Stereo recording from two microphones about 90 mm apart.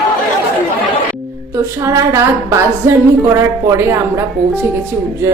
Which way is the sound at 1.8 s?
30° right (ahead or behind).